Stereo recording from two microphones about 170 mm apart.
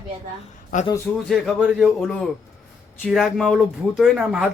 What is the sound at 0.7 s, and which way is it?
Speech, 50° left (ahead or behind).